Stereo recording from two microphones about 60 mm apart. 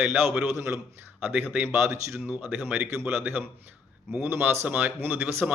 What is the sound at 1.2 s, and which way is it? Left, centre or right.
A man's voice, right.